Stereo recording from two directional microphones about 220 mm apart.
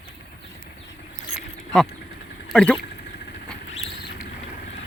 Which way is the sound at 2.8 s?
50° left (ahead or behind).